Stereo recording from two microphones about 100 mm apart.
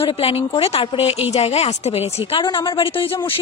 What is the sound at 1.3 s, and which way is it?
Speech, 90° left.